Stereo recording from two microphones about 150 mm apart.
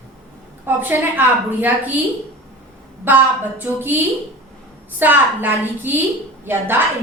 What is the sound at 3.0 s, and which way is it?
Speech, 15° right (ahead or behind).